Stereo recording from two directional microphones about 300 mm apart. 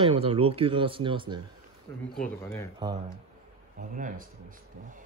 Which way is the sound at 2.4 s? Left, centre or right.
Centre.